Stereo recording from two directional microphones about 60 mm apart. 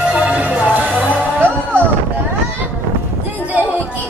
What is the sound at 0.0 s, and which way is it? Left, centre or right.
Music, right.